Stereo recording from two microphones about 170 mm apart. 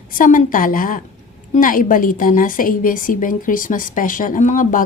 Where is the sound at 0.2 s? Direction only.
50° left (ahead or behind).